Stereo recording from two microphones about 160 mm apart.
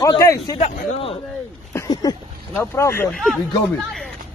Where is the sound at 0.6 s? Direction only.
35° left (ahead or behind).